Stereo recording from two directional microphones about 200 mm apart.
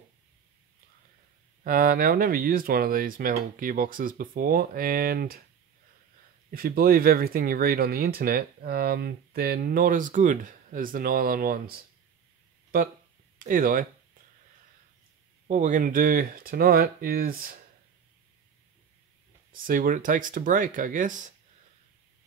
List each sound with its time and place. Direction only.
1.6 s speech: 45° right (ahead or behind)
6.5 s speech: 45° right (ahead or behind)
13.4 s speech: 45° right (ahead or behind)
15.4 s speech: 35° right (ahead or behind)
19.5 s speech: 45° right (ahead or behind)